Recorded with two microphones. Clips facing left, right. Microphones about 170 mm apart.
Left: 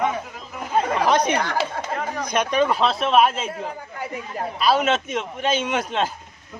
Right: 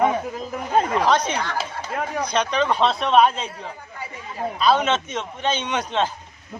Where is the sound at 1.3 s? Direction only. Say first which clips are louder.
Left 3 dB; 55° left (ahead or behind).